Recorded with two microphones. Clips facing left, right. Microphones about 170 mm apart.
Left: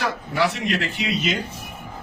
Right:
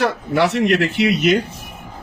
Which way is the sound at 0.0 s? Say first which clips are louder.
Right 6 dB; 70° right (ahead or behind).